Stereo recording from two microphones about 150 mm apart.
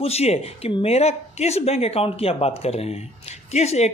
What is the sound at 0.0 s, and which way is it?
Speech, 45° left (ahead or behind).